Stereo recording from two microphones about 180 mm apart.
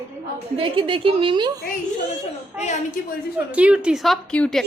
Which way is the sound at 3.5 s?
5° right (ahead or behind).